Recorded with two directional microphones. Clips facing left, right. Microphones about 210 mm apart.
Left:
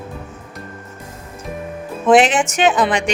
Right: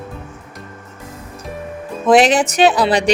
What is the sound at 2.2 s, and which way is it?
Speech, 35° right (ahead or behind).